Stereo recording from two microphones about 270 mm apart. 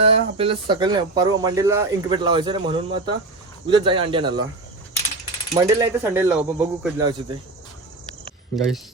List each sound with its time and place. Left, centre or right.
0.0 s speech: right
5.5 s speech: centre
8.5 s speech: centre